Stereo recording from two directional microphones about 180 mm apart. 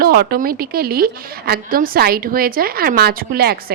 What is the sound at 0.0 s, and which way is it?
A woman's voice, 60° right (ahead or behind).